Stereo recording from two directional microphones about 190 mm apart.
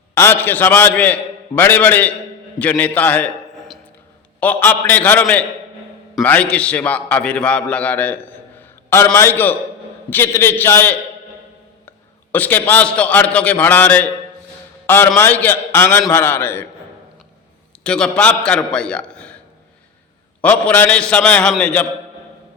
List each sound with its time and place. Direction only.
0.1 s a man's voice: 10° left (ahead or behind)
4.4 s a man's voice: 10° left (ahead or behind)
17.8 s a man's voice: 5° left (ahead or behind)
20.4 s a man's voice: 10° left (ahead or behind)